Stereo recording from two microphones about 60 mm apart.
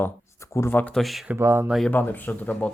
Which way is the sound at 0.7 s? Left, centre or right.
Left.